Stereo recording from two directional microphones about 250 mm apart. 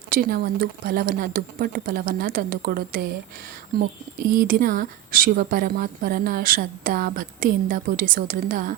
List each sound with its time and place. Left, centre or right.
0.1 s a woman's voice: right
4.4 s a woman's voice: right